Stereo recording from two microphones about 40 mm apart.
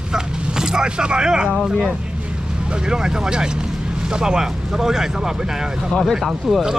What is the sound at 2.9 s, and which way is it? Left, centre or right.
Speech, centre.